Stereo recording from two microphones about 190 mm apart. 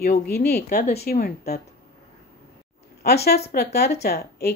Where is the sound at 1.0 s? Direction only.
55° left (ahead or behind).